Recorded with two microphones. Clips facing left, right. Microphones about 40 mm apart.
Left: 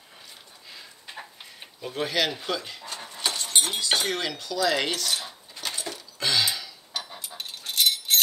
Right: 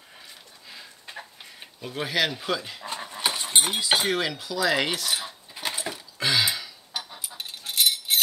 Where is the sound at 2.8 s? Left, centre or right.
Right.